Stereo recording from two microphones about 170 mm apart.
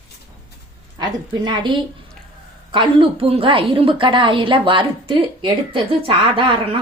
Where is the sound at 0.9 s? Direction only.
25° right (ahead or behind).